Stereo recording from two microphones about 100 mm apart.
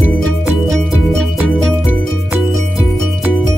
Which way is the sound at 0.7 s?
Centre (ahead or behind).